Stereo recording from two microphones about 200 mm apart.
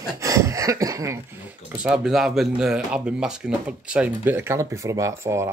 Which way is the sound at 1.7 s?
5° right (ahead or behind).